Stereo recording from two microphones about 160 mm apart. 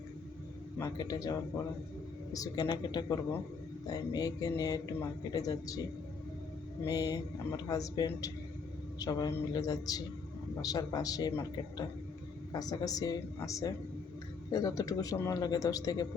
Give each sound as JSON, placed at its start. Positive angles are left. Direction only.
{"t": 0.8, "sound": "a man's voice", "side_deg": 25}
{"t": 6.8, "sound": "a man's voice", "side_deg": 25}
{"t": 12.5, "sound": "a man's voice", "side_deg": 25}